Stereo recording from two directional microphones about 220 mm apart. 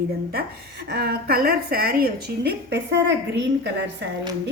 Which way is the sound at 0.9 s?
45° right (ahead or behind).